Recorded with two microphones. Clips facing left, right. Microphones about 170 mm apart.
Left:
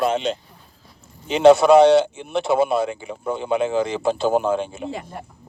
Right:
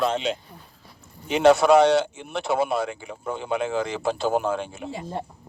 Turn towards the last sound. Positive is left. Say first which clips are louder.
# right 4 dB
turn(degrees=-25)  # may be behind; listen again after turning